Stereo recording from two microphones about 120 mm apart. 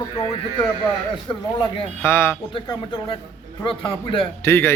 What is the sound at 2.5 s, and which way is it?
Speech, 45° left (ahead or behind).